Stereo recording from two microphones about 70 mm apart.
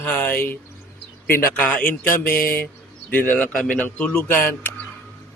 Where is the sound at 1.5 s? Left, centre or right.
Centre.